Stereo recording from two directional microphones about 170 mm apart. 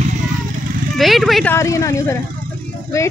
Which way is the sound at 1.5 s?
15° left (ahead or behind).